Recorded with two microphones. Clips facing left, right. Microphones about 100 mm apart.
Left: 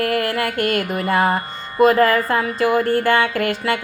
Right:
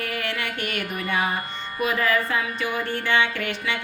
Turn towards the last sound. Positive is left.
turn(degrees=40)  # may be behind; listen again after turning